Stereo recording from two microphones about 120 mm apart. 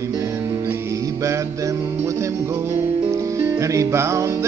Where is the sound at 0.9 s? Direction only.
25° right (ahead or behind).